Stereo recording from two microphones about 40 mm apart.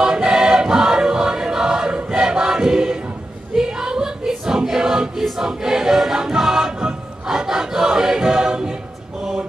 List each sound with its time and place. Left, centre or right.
0.0 s music: centre
3.5 s choir: centre
6.1 s music: centre
6.4 s choir: centre